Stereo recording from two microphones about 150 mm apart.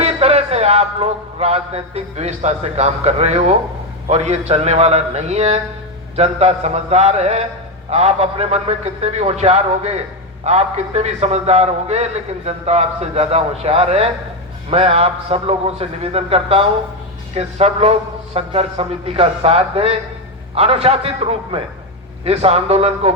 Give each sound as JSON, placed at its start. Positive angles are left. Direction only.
{"t": 0.0, "sound": "a man's voice", "side_deg": -45}